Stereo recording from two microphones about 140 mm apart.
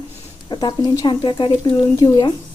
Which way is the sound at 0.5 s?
30° left (ahead or behind).